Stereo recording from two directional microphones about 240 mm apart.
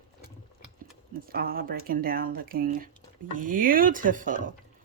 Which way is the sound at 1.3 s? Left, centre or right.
Right.